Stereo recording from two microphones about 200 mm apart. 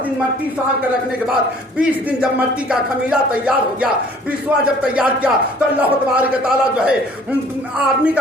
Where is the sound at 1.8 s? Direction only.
5° right (ahead or behind).